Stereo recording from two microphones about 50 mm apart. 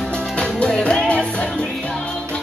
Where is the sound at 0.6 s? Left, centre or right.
Centre.